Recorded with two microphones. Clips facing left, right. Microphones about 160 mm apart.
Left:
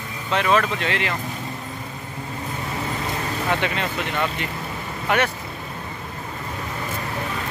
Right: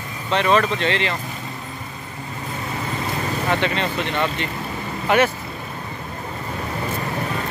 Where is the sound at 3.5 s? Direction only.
10° left (ahead or behind).